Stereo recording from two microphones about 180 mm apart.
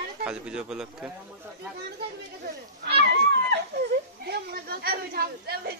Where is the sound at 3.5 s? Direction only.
65° right (ahead or behind).